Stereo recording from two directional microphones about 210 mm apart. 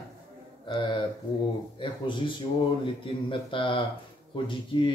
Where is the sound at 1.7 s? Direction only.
25° left (ahead or behind).